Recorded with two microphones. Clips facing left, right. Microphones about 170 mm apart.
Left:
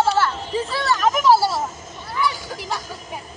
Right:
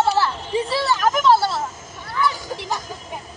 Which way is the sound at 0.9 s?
Centre (ahead or behind).